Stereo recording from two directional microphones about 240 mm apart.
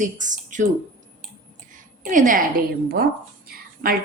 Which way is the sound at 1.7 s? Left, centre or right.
Right.